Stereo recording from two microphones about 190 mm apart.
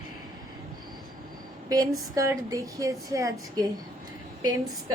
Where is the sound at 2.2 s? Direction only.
15° right (ahead or behind).